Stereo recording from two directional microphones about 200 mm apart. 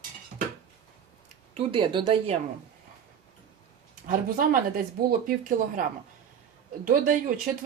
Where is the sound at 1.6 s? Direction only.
25° right (ahead or behind).